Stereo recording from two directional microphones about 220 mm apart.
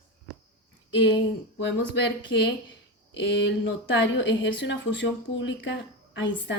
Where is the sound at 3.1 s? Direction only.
55° left (ahead or behind).